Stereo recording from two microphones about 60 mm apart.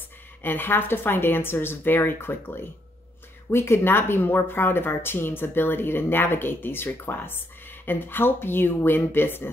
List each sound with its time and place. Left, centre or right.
0.4 s speech: left